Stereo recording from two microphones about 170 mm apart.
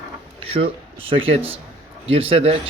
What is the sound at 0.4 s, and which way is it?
Speech, 35° right (ahead or behind).